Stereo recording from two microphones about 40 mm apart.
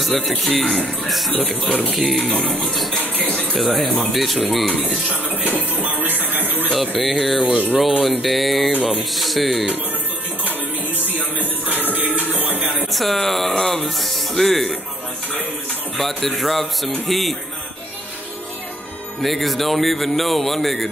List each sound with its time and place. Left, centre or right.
0.0 s speech: centre
2.1 s music: left
2.6 s speech: centre
3.3 s music: left
3.5 s speech: centre
5.3 s music: right
6.3 s a sound: right
6.7 s speech: centre
7.4 s a sound: right
8.0 s speech: centre
11.3 s music: right
12.9 s speech: centre
16.0 s speech: centre
19.2 s speech: centre